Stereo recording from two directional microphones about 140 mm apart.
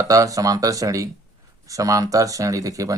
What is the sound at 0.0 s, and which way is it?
Speech, 25° right (ahead or behind).